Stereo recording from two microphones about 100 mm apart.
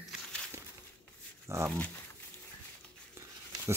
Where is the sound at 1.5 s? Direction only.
30° right (ahead or behind).